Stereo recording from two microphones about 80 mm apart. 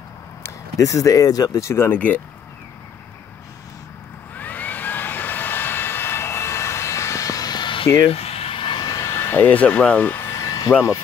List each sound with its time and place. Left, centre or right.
0.7 s speech: left
2.0 s speech: centre
4.4 s vehicle: left
8.8 s vehicle: left
9.1 s speech: left
10.2 s a sound: left